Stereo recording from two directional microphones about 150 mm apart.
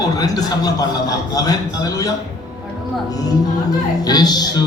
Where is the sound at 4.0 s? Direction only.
25° left (ahead or behind).